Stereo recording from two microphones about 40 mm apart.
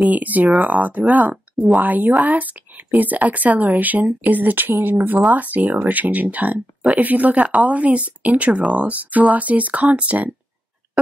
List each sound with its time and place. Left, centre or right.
0.1 s speech: right
5.2 s speech: right